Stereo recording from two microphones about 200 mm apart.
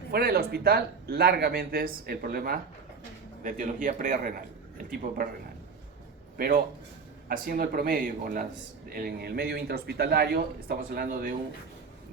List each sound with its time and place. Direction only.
0.1 s speech: 50° right (ahead or behind)
6.3 s a man's voice: 50° right (ahead or behind)